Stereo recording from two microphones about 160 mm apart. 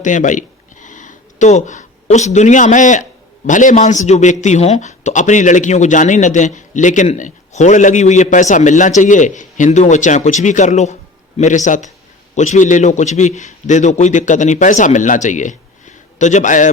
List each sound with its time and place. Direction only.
0.0 s speech: 50° left (ahead or behind)